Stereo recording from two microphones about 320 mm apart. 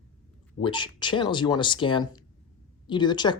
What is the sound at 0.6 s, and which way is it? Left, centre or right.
Speech, centre.